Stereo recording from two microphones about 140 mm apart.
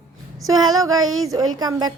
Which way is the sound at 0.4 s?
25° right (ahead or behind).